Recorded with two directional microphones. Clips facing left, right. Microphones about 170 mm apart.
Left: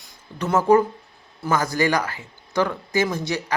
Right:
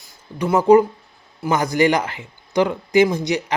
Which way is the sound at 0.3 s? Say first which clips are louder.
Right 4 dB; 15° right (ahead or behind).